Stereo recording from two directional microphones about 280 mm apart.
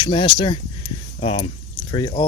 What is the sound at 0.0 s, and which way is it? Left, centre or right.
Speech, centre.